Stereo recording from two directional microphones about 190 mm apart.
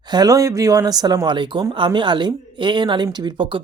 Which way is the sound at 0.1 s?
20° right (ahead or behind).